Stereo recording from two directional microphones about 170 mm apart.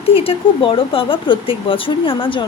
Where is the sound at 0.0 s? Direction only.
35° left (ahead or behind).